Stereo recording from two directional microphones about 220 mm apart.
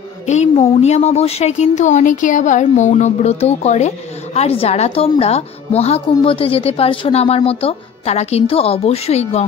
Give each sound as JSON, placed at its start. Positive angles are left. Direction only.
{"t": 0.3, "sound": "speech", "side_deg": 30}